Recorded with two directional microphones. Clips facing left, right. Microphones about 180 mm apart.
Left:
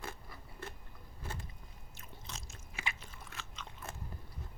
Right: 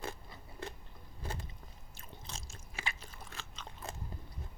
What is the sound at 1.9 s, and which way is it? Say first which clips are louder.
Biting: right 1 dB; 30° right (ahead or behind).